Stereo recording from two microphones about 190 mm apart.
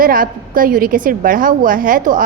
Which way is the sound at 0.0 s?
50° right (ahead or behind).